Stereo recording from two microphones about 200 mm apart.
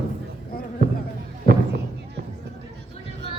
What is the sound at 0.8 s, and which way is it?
Music, 50° right (ahead or behind).